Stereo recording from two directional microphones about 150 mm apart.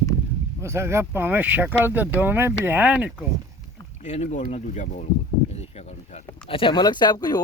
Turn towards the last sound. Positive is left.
turn(degrees=25)  # may be behind; listen again after turning